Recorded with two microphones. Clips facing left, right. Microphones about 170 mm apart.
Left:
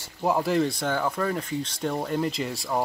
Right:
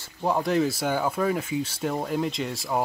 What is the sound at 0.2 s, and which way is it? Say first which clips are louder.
Speech: even; 5° left (ahead or behind).